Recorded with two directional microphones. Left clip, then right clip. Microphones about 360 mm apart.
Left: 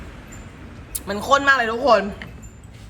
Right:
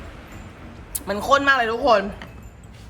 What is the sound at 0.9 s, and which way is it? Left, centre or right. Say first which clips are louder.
Speech: even; centre.